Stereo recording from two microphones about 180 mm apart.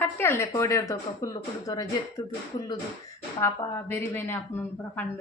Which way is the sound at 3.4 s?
20° left (ahead or behind).